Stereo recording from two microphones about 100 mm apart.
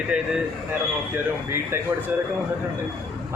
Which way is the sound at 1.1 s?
25° right (ahead or behind).